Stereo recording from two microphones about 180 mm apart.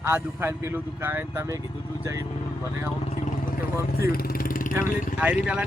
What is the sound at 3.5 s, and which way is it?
Vehicle, 55° left (ahead or behind).